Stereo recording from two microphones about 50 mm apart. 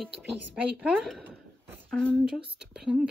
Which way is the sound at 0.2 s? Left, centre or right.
Right.